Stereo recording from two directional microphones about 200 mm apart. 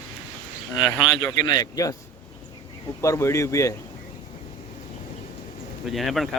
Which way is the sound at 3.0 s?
15° left (ahead or behind).